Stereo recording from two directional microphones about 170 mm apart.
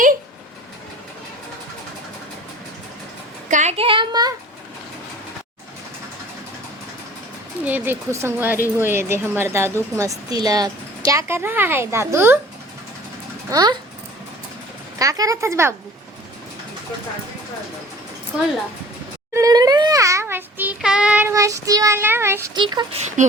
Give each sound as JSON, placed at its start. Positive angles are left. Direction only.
{"t": 3.5, "sound": "a child's voice", "side_deg": -40}
{"t": 7.6, "sound": "speech", "side_deg": -10}
{"t": 13.5, "sound": "speech", "side_deg": -20}
{"t": 14.9, "sound": "speech", "side_deg": -20}
{"t": 19.3, "sound": "a sound", "side_deg": -20}
{"t": 22.5, "sound": "speech", "side_deg": -25}
{"t": 23.2, "sound": "speech", "side_deg": -45}